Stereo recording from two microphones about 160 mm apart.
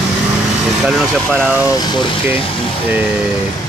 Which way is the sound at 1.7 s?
25° left (ahead or behind).